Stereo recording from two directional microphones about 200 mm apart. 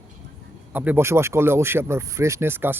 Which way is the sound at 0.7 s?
10° right (ahead or behind).